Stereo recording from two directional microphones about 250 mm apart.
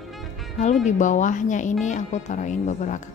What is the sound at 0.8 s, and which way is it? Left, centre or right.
Speech, left.